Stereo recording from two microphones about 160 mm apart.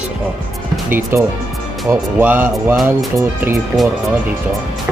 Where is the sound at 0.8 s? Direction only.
15° right (ahead or behind).